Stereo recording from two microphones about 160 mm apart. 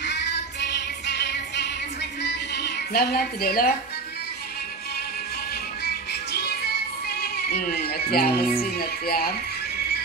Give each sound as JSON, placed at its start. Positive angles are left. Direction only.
{"t": 0.0, "sound": "music", "side_deg": 90}
{"t": 5.9, "sound": "music", "side_deg": 90}
{"t": 8.7, "sound": "speech", "side_deg": 75}